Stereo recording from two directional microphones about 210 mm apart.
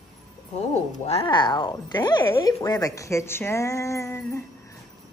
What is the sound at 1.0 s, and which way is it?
Speech, 25° left (ahead or behind).